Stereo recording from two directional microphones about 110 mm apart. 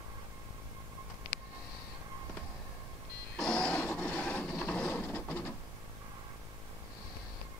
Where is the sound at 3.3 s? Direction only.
5° left (ahead or behind).